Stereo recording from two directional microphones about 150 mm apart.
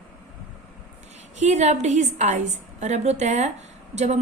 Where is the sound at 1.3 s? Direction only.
50° right (ahead or behind).